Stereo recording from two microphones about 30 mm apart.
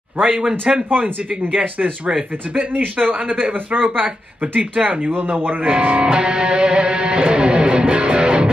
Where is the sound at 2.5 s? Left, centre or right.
Right.